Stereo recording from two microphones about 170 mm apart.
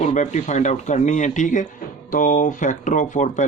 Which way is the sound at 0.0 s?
40° left (ahead or behind).